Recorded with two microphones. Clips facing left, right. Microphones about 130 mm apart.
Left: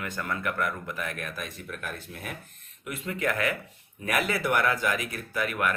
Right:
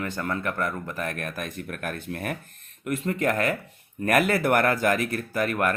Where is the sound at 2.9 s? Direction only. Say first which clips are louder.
Right 5 dB; 45° right (ahead or behind).